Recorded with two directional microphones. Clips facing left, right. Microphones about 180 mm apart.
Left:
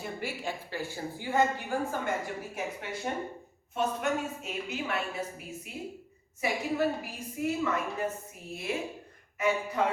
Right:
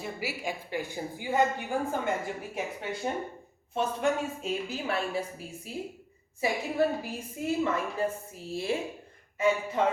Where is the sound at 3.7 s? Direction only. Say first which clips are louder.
Right 2 dB; 30° right (ahead or behind).